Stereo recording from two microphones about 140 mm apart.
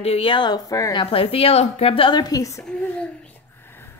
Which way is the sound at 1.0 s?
45° left (ahead or behind).